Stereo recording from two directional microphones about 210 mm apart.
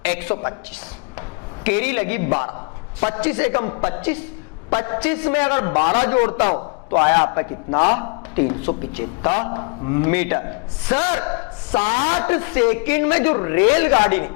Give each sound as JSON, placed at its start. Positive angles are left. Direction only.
{"t": 0.0, "sound": "a woman's voice", "side_deg": 10}
{"t": 1.6, "sound": "a man's voice", "side_deg": 10}
{"t": 5.7, "sound": "a man's voice", "side_deg": 30}
{"t": 9.3, "sound": "a man's voice", "side_deg": 25}
{"t": 11.7, "sound": "a man's voice", "side_deg": 30}
{"t": 12.2, "sound": "a man's voice", "side_deg": 10}